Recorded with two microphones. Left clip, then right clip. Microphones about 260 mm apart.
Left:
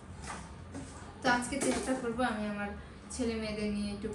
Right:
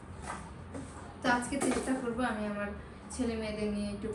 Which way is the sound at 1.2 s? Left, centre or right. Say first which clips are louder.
Even; centre.